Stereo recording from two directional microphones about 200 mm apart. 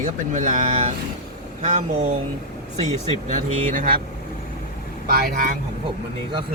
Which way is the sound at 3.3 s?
40° right (ahead or behind).